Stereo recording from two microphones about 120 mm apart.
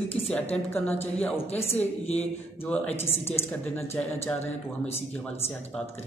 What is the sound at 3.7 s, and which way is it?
A woman's voice, 10° left (ahead or behind).